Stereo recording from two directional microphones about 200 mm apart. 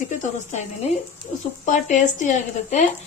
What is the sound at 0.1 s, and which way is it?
A woman's voice, 35° left (ahead or behind).